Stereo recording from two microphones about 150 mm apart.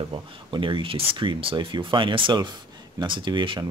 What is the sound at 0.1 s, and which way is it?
Speech, 35° right (ahead or behind).